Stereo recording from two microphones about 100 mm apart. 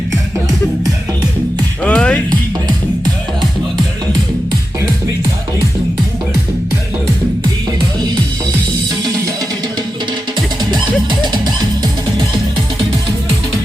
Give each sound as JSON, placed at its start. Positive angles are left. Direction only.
{"t": 1.8, "sound": "music", "side_deg": 10}
{"t": 2.3, "sound": "music", "side_deg": -40}
{"t": 10.6, "sound": "music", "side_deg": -45}